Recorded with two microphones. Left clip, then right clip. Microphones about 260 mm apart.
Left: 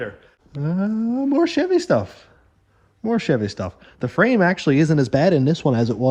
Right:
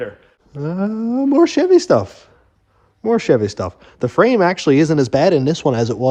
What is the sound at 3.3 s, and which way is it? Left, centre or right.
Speech, left.